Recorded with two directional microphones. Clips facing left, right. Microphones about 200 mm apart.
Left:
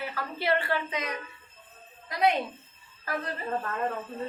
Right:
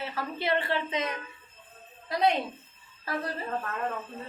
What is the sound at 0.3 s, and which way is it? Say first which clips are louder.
Speech: left 1 dB; 20° right (ahead or behind).